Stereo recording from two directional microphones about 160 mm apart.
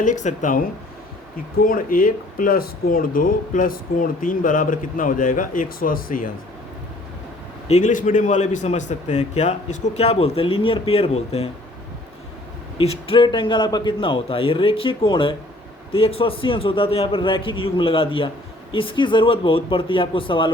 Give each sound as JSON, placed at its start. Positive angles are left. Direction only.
{"t": 0.0, "sound": "speech", "side_deg": 50}
{"t": 1.6, "sound": "speech", "side_deg": 60}
{"t": 7.7, "sound": "speech", "side_deg": 50}
{"t": 12.7, "sound": "a man's voice", "side_deg": 35}